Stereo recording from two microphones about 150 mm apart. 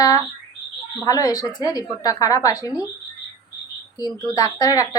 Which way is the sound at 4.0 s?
25° left (ahead or behind).